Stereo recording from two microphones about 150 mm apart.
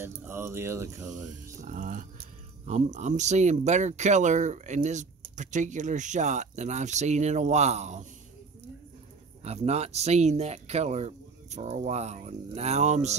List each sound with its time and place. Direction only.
0.0 s speech: 15° right (ahead or behind)
1.6 s speech: 55° right (ahead or behind)
9.4 s speech: 45° right (ahead or behind)